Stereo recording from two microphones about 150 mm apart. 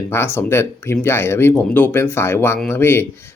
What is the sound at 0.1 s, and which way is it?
Speech, 15° left (ahead or behind).